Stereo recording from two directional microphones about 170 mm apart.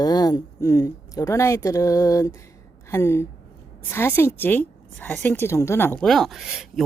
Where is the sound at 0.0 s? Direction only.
20° left (ahead or behind).